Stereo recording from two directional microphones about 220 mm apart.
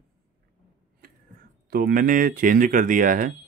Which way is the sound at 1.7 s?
40° right (ahead or behind).